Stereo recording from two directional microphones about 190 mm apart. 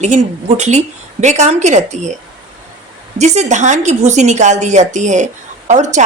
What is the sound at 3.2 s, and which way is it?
A woman's voice, 35° right (ahead or behind).